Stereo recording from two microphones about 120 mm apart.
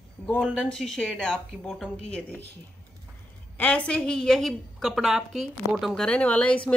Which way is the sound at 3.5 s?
10° left (ahead or behind).